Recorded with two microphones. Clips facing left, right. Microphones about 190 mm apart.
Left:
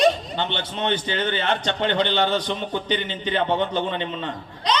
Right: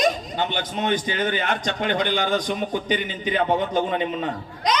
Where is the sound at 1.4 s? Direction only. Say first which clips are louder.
Left 1 dB; 30° left (ahead or behind).